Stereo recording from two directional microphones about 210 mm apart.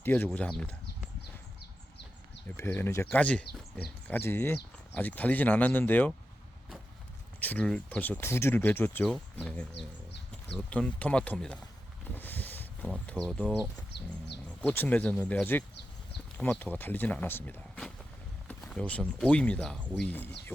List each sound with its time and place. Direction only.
0.0 s speech: 10° left (ahead or behind)
2.6 s speech: 10° left (ahead or behind)
7.3 s speech: 5° left (ahead or behind)
9.7 s bird: 55° left (ahead or behind)
10.7 s speech: 5° left (ahead or behind)
12.1 s a sound: 10° left (ahead or behind)
13.1 s speech: 5° left (ahead or behind)
14.6 s speech: 10° left (ahead or behind)